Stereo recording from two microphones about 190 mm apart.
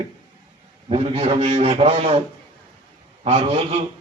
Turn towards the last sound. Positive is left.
turn(degrees=-30)  # may be behind; listen again after turning